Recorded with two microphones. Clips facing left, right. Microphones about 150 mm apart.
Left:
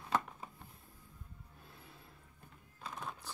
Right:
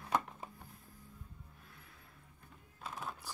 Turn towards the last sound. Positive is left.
turn(degrees=-5)  # may be behind; listen again after turning